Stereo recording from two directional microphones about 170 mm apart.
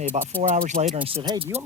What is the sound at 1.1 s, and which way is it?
Speech, 25° right (ahead or behind).